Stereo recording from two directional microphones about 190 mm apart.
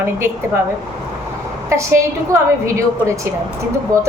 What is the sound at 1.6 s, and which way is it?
A woman's voice, 15° right (ahead or behind).